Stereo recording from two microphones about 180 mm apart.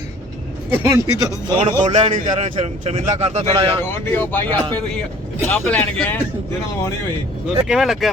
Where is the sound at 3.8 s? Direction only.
10° left (ahead or behind).